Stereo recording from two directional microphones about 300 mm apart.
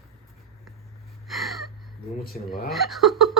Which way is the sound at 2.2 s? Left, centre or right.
Left.